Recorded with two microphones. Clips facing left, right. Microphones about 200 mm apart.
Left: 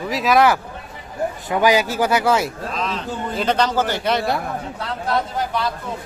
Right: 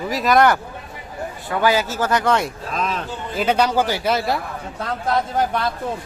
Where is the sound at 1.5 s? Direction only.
15° left (ahead or behind).